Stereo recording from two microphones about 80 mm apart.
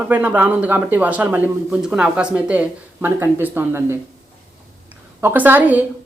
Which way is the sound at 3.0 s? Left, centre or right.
Right.